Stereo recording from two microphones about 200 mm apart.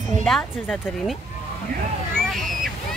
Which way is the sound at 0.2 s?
5° left (ahead or behind).